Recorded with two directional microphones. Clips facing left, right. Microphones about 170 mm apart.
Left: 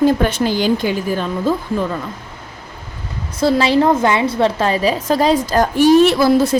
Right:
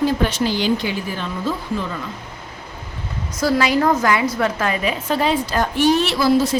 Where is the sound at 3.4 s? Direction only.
30° left (ahead or behind); by 6.6 s 55° left (ahead or behind).